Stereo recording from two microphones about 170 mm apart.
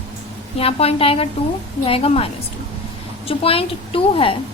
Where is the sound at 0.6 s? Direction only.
35° left (ahead or behind).